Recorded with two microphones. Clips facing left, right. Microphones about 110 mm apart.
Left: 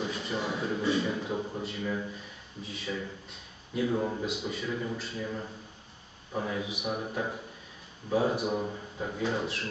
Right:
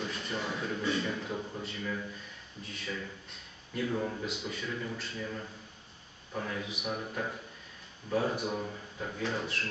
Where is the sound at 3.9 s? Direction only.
20° left (ahead or behind).